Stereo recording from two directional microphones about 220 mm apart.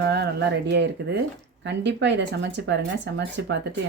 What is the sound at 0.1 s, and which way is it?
Speech, 50° right (ahead or behind).